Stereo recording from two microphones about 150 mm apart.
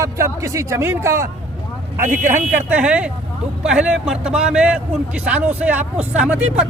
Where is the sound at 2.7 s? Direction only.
10° right (ahead or behind).